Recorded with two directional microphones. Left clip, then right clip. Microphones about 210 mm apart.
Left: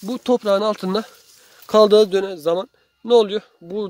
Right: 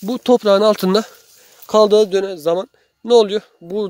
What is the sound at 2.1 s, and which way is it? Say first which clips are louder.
Speech: right 2 dB; 25° right (ahead or behind).